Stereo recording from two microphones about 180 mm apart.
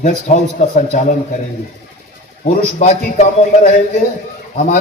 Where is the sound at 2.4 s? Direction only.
40° left (ahead or behind).